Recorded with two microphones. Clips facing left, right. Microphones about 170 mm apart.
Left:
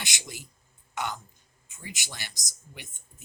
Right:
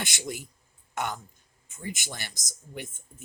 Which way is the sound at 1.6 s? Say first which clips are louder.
Right 6 dB; 50° right (ahead or behind).